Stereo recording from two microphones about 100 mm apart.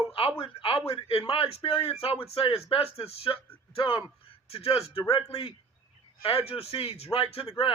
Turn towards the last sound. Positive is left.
turn(degrees=70)  # may be behind; listen again after turning